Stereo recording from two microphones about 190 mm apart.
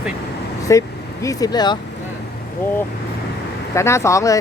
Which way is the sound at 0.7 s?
15° left (ahead or behind).